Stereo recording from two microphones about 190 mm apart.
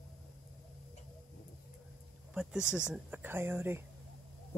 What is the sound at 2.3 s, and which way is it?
Speech, 5° right (ahead or behind).